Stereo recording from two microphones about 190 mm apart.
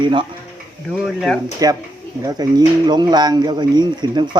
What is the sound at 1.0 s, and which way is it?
Speech, centre (ahead or behind).